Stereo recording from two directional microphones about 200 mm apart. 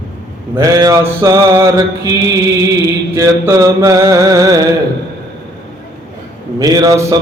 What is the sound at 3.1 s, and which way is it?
Mantra, 15° right (ahead or behind).